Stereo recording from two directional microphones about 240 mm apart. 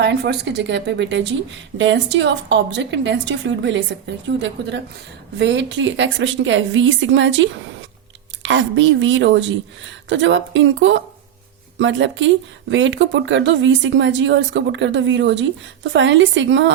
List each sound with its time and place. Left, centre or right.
0.0 s a woman's voice: right